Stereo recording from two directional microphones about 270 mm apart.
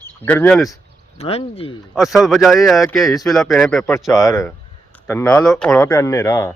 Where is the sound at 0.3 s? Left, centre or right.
Centre.